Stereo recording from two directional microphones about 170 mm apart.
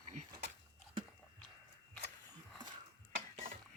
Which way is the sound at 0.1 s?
45° right (ahead or behind).